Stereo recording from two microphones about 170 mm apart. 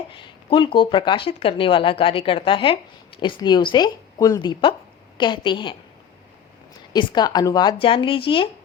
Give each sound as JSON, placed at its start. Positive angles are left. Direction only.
{"t": 0.1, "sound": "speech", "side_deg": 30}
{"t": 6.9, "sound": "speech", "side_deg": 25}